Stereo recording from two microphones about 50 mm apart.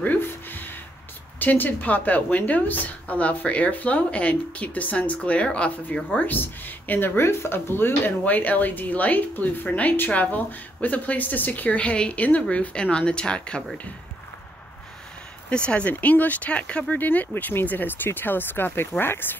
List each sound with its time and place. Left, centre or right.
0.0 s a sound: left
1.4 s speech: left
6.0 s speech: left
8.2 s speech: left; by 13.7 s centre
15.5 s speech: left
15.9 s speech: left